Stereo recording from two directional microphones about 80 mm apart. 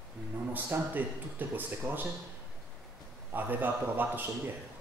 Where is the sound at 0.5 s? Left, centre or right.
Right.